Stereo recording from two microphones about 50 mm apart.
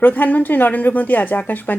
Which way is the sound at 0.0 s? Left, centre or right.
Left.